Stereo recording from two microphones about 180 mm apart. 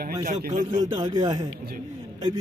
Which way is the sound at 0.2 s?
45° right (ahead or behind).